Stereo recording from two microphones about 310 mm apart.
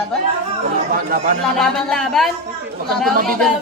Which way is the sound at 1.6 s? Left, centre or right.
Centre.